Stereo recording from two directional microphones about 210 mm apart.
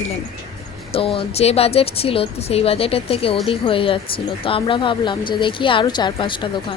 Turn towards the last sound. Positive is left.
turn(degrees=25)  # may be behind; listen again after turning